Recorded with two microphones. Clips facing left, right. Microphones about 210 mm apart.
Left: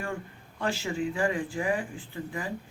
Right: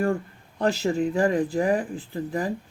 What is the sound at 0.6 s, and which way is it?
Speech, 40° right (ahead or behind).